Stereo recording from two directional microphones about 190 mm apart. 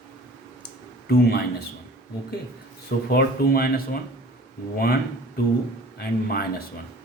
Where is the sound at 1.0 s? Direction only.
55° left (ahead or behind).